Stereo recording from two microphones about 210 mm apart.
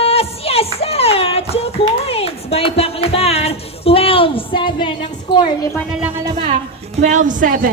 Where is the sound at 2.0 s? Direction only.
30° left (ahead or behind).